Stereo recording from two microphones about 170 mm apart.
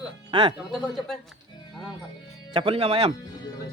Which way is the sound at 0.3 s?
25° right (ahead or behind).